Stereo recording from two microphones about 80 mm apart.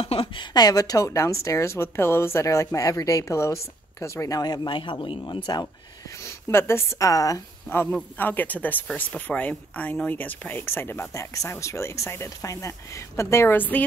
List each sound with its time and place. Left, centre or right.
0.3 s speech: left
4.4 s speech: left
6.2 s a woman's voice: left
7.7 s speech: left
8.2 s speech: left
13.6 s speech: left